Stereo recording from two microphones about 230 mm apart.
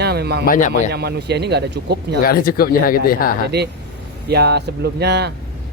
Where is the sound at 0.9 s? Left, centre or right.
Right.